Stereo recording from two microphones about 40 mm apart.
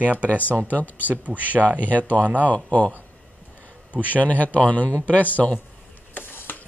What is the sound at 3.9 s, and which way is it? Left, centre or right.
Speech, left.